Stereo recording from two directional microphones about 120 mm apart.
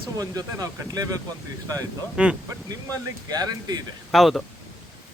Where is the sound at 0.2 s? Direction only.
30° right (ahead or behind).